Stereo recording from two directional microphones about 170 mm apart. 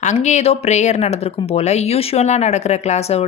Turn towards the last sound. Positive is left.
turn(degrees=40)  # may be behind; listen again after turning